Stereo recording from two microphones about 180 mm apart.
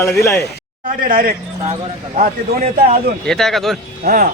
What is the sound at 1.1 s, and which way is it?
Speech, 50° right (ahead or behind).